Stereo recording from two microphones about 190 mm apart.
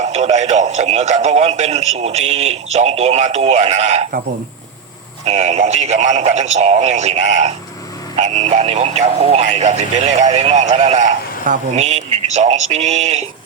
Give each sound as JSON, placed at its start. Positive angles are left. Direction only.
{"t": 0.0, "sound": "speech", "side_deg": -35}
{"t": 5.2, "sound": "speech", "side_deg": -35}